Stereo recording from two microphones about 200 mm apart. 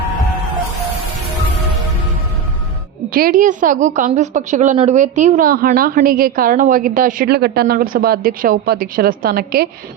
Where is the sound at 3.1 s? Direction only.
45° right (ahead or behind).